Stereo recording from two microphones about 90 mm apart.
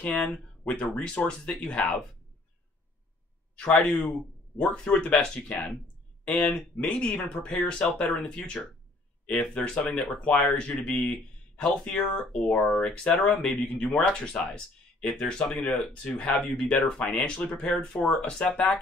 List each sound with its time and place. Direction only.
0.0 s speech: 10° left (ahead or behind)
3.5 s speech: 10° left (ahead or behind)
9.2 s speech: 15° left (ahead or behind)